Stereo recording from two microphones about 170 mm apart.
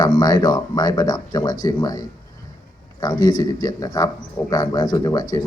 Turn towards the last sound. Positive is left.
turn(degrees=20)  # may be behind; listen again after turning